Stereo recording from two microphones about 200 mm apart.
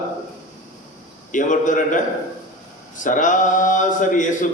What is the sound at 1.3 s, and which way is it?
Speech, 40° left (ahead or behind).